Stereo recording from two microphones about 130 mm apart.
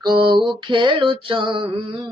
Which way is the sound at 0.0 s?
35° right (ahead or behind).